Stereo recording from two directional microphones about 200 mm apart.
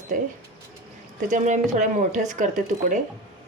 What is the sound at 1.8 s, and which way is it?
A woman's voice, 40° right (ahead or behind).